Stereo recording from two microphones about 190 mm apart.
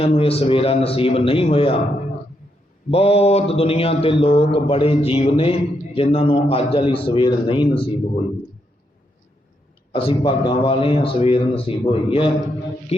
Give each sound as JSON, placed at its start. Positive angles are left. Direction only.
{"t": 0.0, "sound": "speech", "side_deg": 30}
{"t": 2.9, "sound": "speech", "side_deg": 30}
{"t": 9.9, "sound": "speech", "side_deg": 25}